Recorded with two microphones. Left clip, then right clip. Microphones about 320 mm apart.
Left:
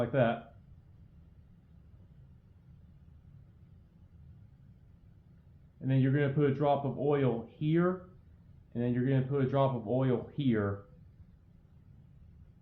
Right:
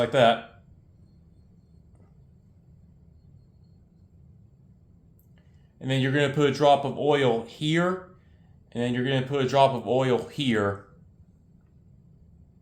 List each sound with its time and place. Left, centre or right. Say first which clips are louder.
0.0 s speech: right 9 dB; centre
5.8 s speech: right 7 dB; centre